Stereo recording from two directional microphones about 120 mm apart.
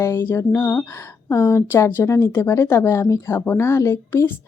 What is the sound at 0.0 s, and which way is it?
A woman's voice, 20° left (ahead or behind).